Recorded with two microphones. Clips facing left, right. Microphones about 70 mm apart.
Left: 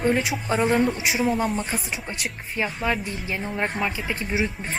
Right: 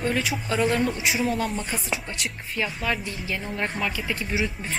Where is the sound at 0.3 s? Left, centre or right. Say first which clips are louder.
Left 1 dB; left.